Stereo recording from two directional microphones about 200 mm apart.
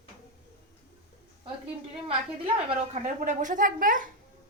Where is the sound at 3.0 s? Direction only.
40° right (ahead or behind).